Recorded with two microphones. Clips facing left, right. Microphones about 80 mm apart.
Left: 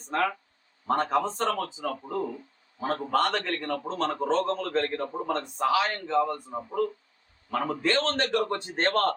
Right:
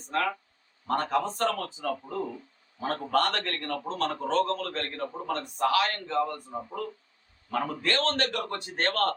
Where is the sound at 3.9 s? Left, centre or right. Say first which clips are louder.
Even; left.